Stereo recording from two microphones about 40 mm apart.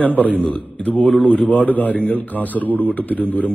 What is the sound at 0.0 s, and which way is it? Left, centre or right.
A man's voice, left.